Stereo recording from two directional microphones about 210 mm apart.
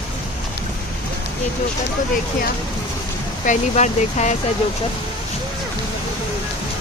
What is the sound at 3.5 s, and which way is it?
Speech, 35° left (ahead or behind).